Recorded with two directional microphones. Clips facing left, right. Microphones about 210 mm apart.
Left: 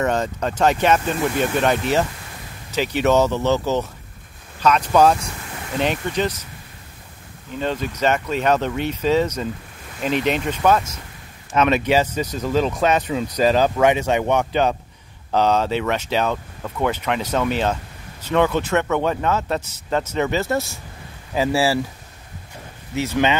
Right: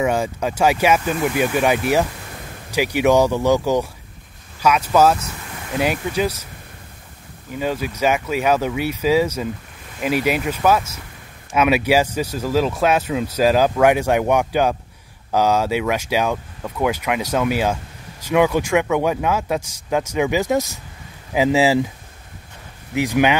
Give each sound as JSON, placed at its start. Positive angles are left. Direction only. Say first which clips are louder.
{"t": 0.0, "sound": "speech", "louder": "right 1 dB", "side_deg": -10}
{"t": 7.5, "sound": "speech", "louder": "right 1 dB", "side_deg": -10}
{"t": 22.9, "sound": "speech", "louder": "right 3 dB", "side_deg": -15}